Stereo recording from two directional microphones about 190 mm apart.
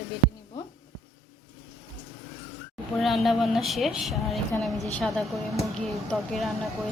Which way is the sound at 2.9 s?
Centre (ahead or behind).